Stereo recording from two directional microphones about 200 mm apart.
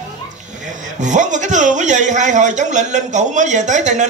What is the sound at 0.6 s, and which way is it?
A man's voice, 40° right (ahead or behind).